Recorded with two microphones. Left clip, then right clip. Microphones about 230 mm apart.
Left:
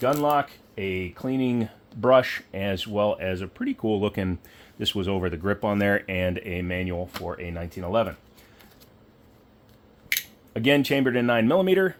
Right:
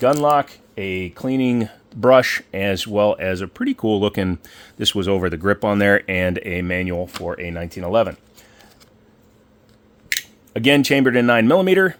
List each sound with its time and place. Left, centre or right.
0.0 s speech: right
10.1 s scissors: right
10.5 s speech: right